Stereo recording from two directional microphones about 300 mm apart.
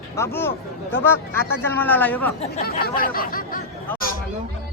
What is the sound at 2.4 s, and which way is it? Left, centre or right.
Speech, left.